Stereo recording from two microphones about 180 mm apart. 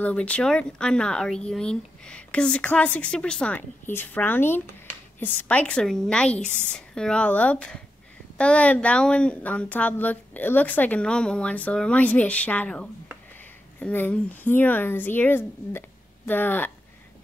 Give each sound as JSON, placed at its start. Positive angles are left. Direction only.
{"t": 0.0, "sound": "a woman's voice", "side_deg": 5}